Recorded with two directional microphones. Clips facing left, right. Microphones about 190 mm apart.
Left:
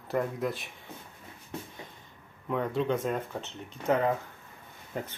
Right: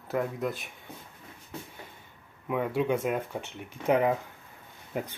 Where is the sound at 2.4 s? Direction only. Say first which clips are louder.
Right 1 dB; 10° right (ahead or behind).